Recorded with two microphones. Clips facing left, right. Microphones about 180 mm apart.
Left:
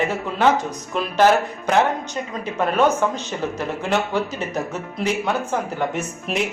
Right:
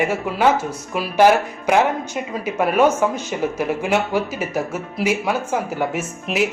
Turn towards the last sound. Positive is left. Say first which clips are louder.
# right 2 dB
turn(degrees=-5)  # may be behind; listen again after turning